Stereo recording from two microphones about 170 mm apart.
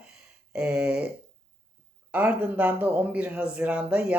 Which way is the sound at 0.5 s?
5° right (ahead or behind).